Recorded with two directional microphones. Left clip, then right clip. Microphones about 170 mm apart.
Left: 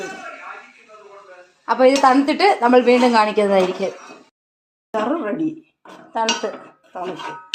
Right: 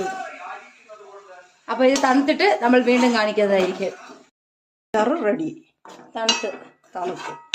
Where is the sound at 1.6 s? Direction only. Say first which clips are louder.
Left 5 dB; 10° left (ahead or behind).